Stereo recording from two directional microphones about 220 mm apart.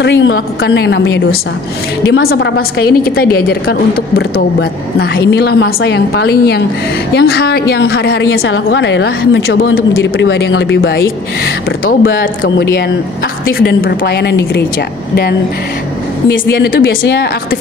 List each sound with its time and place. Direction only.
0.0 s a woman's voice: 55° left (ahead or behind)
2.2 s a woman's voice: 45° left (ahead or behind)
12.0 s speech: 55° left (ahead or behind)
13.5 s a woman's voice: 40° left (ahead or behind)
16.5 s a woman's voice: 50° left (ahead or behind)